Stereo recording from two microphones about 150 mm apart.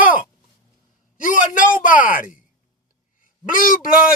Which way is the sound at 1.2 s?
65° left (ahead or behind).